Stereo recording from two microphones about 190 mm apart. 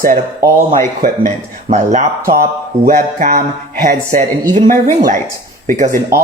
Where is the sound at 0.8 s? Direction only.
40° right (ahead or behind).